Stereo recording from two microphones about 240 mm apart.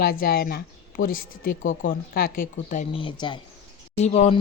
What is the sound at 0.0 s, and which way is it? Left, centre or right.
Speech, left.